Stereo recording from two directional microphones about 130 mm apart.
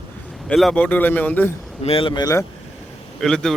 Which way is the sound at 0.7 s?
10° left (ahead or behind).